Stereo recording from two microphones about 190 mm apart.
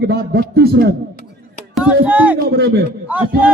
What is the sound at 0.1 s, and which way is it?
Speech, 60° right (ahead or behind).